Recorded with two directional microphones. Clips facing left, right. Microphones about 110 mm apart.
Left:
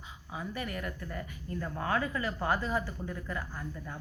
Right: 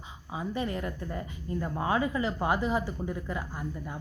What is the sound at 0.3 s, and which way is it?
Speech, 25° right (ahead or behind).